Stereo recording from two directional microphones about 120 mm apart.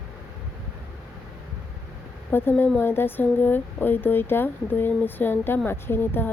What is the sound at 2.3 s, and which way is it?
Speech, 15° left (ahead or behind).